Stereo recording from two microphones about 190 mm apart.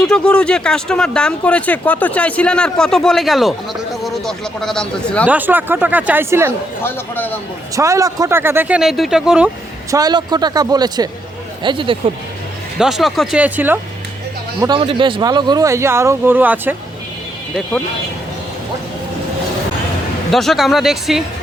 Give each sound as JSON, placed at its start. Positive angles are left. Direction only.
{"t": 0.0, "sound": "speech", "side_deg": 5}
{"t": 5.3, "sound": "speech", "side_deg": -10}
{"t": 6.8, "sound": "a man's voice", "side_deg": 10}
{"t": 7.8, "sound": "speech", "side_deg": -15}
{"t": 9.9, "sound": "a man's voice", "side_deg": -20}
{"t": 12.8, "sound": "speech", "side_deg": 0}
{"t": 14.6, "sound": "speech", "side_deg": -25}
{"t": 20.3, "sound": "speech", "side_deg": 0}